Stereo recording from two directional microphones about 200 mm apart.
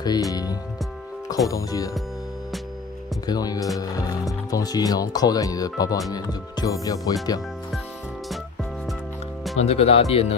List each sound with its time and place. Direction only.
0.0 s speech: 20° left (ahead or behind)
3.3 s speech: 20° left (ahead or behind)
9.6 s speech: 30° left (ahead or behind)